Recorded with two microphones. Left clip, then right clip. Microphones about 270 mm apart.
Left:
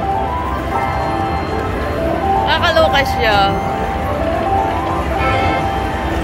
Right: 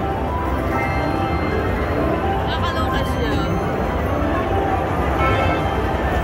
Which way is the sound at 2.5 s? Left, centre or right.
Centre.